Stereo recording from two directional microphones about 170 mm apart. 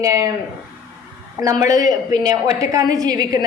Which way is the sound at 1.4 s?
20° right (ahead or behind).